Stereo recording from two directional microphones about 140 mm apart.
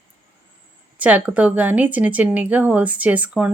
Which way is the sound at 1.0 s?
10° right (ahead or behind).